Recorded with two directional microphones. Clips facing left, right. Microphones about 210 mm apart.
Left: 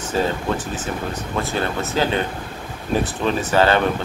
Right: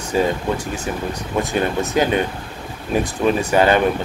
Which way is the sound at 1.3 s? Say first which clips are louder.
Right 4 dB; 15° right (ahead or behind).